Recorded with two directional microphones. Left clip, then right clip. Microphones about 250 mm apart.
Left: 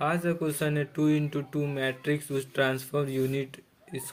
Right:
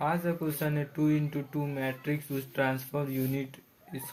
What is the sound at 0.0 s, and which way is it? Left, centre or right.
Speech, left.